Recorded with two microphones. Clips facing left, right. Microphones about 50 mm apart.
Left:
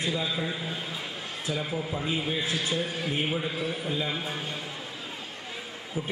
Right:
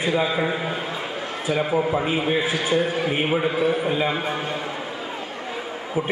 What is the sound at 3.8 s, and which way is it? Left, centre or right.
Speech, right.